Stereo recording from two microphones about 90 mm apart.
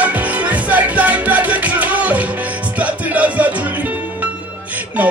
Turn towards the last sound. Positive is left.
turn(degrees=-15)  # may be behind; listen again after turning